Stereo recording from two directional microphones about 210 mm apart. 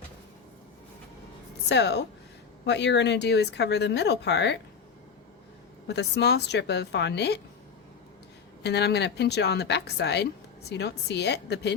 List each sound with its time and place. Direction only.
1.7 s speech: 55° left (ahead or behind)
5.9 s speech: 55° left (ahead or behind)
8.6 s speech: 50° left (ahead or behind)